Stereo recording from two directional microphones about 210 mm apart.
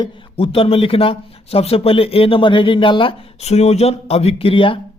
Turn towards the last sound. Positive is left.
turn(degrees=25)  # may be behind; listen again after turning